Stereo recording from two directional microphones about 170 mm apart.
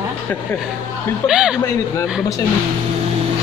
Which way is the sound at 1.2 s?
5° right (ahead or behind).